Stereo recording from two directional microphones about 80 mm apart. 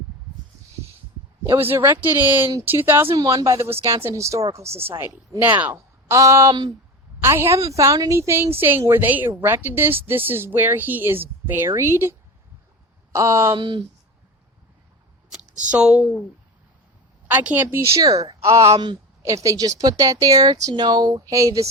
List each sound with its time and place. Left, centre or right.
1.5 s speech: right
3.2 s a woman's voice: right
5.4 s speech: right
6.1 s a woman's voice: right
6.5 s speech: right
7.2 s a woman's voice: right
13.1 s a woman's voice: right
13.6 s speech: right
15.7 s speech: centre
17.2 s speech: right
18.0 s speech: right
18.4 s a woman's voice: right
20.7 s speech: right